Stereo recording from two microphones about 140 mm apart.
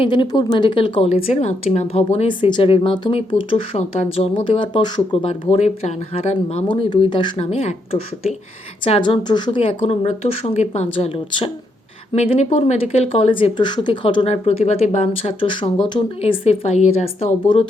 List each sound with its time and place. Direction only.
0.0 s a woman's voice: 35° left (ahead or behind)
7.3 s a woman's voice: 45° left (ahead or behind)
12.1 s a woman's voice: 50° left (ahead or behind)